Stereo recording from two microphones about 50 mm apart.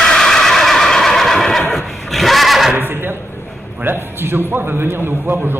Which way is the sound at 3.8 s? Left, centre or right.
Right.